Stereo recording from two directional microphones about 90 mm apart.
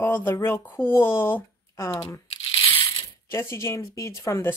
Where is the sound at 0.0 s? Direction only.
25° left (ahead or behind).